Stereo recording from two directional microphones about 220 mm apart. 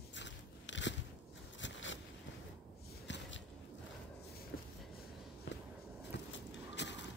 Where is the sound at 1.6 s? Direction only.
60° left (ahead or behind).